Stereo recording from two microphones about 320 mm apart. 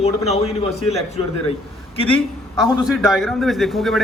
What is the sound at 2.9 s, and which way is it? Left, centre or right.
A man's voice, centre.